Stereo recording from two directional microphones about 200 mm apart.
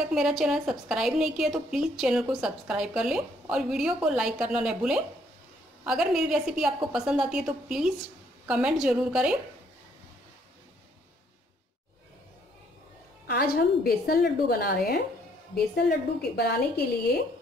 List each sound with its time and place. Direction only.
0.1 s a woman's voice: centre (ahead or behind)
13.3 s a woman's voice: 50° left (ahead or behind)